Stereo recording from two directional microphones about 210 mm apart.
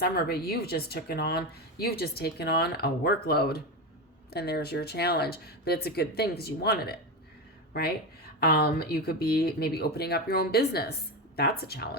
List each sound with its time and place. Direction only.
0.0 s speech: 50° left (ahead or behind)